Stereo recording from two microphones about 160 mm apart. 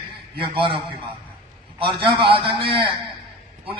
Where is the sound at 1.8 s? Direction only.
30° right (ahead or behind).